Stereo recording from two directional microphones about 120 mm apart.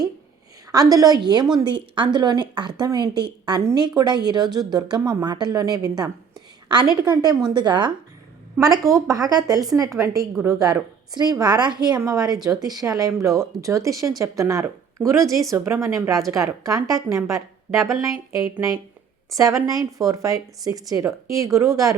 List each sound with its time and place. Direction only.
0.7 s speech: 30° right (ahead or behind)
8.6 s speech: 25° right (ahead or behind)